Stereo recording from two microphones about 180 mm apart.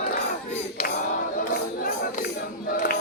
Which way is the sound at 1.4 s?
50° left (ahead or behind).